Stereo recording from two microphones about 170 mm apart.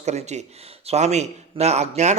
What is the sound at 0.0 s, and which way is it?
Speech, 40° right (ahead or behind).